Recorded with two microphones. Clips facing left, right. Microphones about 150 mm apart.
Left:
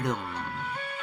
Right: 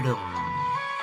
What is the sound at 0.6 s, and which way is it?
Music, 35° right (ahead or behind).